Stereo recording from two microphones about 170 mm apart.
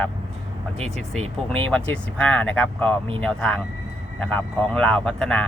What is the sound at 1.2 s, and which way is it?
Speech, 35° right (ahead or behind).